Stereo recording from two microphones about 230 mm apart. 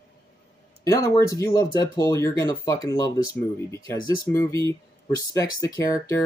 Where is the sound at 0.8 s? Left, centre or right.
Centre.